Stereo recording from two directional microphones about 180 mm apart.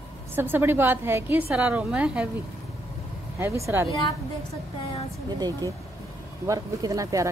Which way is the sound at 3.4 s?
15° right (ahead or behind).